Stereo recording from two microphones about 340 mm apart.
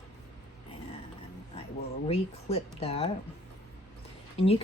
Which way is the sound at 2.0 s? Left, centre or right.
Centre.